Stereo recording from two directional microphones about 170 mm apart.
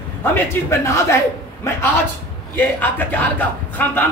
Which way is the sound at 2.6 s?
10° left (ahead or behind).